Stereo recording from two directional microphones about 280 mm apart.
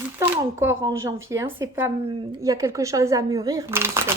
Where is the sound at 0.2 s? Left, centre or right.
Centre.